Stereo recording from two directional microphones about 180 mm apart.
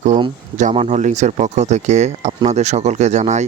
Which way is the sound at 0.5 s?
40° right (ahead or behind).